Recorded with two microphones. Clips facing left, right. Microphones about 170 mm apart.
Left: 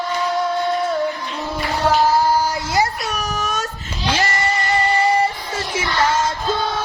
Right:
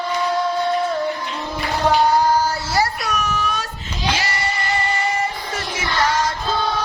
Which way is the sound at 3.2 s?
40° left (ahead or behind).